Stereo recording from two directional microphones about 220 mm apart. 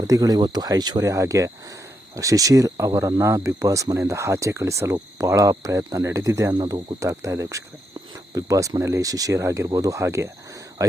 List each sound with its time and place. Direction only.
0.1 s speech: 15° right (ahead or behind)